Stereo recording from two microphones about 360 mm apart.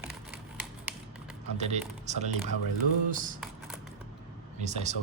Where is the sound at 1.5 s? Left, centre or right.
Centre.